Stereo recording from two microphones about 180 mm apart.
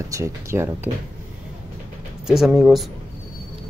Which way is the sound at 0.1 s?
15° right (ahead or behind).